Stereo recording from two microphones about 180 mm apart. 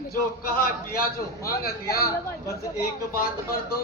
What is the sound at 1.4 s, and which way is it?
Speech, 55° left (ahead or behind).